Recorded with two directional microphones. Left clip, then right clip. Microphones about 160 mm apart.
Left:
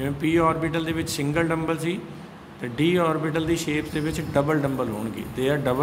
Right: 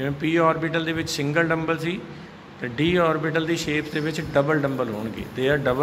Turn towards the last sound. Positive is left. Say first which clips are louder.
# right 2 dB
turn(degrees=0)  # may be behind; listen again after turning